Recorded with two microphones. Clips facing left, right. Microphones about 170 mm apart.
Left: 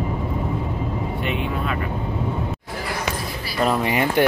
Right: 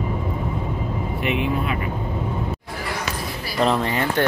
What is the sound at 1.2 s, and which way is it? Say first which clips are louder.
Vehicle: right 5 dB; 5° right (ahead or behind).